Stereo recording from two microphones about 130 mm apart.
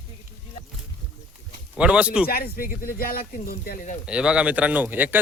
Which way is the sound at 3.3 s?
90° left.